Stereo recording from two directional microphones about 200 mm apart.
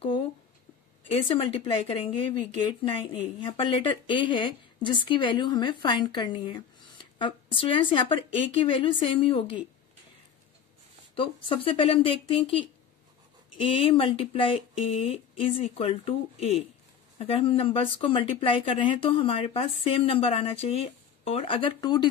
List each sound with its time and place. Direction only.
1.3 s speech: 25° left (ahead or behind)
11.1 s speech: 25° left (ahead or behind)